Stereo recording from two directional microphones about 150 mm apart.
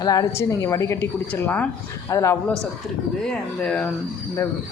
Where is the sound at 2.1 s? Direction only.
20° left (ahead or behind).